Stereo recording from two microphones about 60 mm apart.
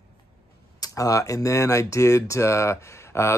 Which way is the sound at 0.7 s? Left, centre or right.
Left.